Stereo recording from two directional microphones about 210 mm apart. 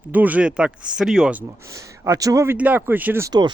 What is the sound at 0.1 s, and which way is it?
Speech, 10° right (ahead or behind).